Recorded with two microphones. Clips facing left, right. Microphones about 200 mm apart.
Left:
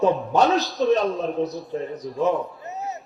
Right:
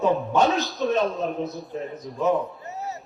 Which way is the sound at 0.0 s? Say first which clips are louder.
Left 2 dB; 35° left (ahead or behind).